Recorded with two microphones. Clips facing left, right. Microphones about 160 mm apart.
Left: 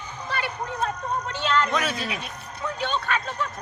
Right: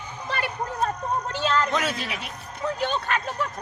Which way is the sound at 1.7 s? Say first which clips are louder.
Even; 25° right (ahead or behind).